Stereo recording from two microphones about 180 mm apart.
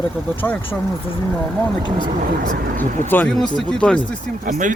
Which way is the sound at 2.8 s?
10° left (ahead or behind).